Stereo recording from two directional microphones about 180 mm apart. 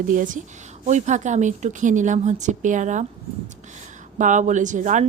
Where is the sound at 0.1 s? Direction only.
45° right (ahead or behind).